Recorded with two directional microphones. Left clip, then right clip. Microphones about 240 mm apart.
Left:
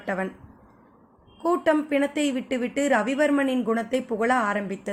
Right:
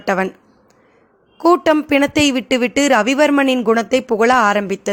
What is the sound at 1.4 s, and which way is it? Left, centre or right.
A man's voice, right.